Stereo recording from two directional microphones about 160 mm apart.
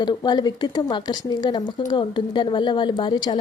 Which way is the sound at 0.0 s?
25° left (ahead or behind).